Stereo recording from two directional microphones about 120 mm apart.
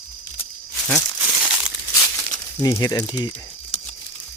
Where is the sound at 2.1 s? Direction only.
30° left (ahead or behind).